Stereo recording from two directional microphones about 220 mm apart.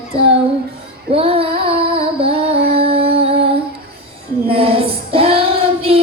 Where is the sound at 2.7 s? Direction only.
25° right (ahead or behind).